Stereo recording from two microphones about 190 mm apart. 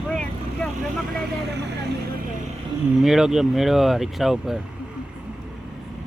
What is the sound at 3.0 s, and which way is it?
Speech, centre (ahead or behind).